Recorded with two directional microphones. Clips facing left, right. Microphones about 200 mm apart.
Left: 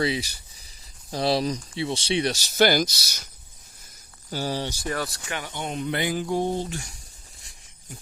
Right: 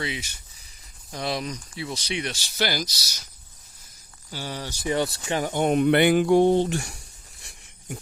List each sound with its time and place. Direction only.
0.0 s speech: 35° left (ahead or behind); by 3.2 s 55° left (ahead or behind)
4.3 s speech: 40° left (ahead or behind)
5.1 s speech: 30° right (ahead or behind)
5.5 s speech: 50° right (ahead or behind); by 7.0 s 70° right (ahead or behind)
7.4 s a sound: 70° right (ahead or behind)